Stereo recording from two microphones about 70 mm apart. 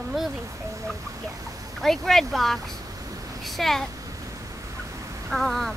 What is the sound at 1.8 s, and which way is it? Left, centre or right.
Speech, centre.